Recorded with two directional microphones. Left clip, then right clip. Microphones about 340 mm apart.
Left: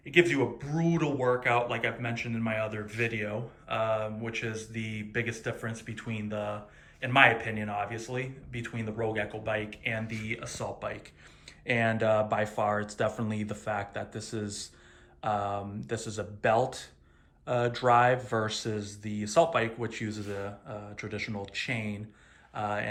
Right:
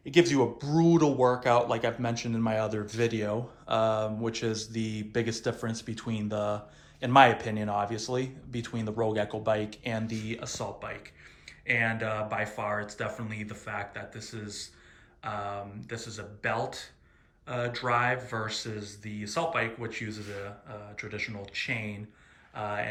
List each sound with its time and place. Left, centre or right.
0.0 s speech: centre